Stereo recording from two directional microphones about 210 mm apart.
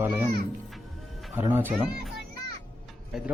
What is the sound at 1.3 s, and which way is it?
Speech, 10° right (ahead or behind).